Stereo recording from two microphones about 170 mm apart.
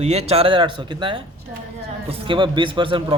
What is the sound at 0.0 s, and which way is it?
Speech, 40° right (ahead or behind).